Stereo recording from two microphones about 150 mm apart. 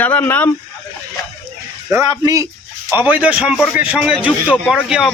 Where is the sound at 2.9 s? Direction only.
10° right (ahead or behind).